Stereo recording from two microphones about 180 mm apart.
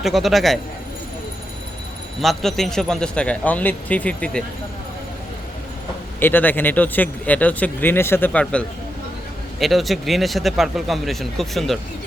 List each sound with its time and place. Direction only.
0.0 s speech: centre (ahead or behind)
2.2 s speech: centre (ahead or behind)
6.1 s speech: 10° left (ahead or behind)